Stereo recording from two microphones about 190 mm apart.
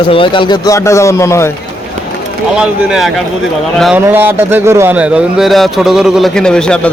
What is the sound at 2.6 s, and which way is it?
Speech, centre (ahead or behind).